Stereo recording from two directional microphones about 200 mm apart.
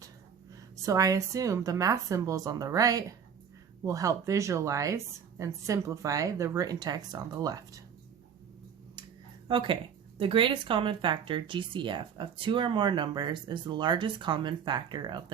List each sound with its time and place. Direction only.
0.8 s speech: 15° right (ahead or behind)
9.5 s speech: 25° right (ahead or behind)